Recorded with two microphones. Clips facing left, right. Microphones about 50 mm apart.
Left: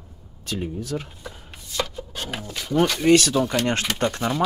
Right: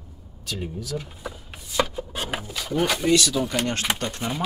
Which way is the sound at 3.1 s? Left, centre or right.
Left.